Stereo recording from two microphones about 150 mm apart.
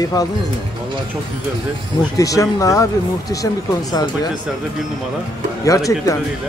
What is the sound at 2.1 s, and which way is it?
Speech, 20° left (ahead or behind).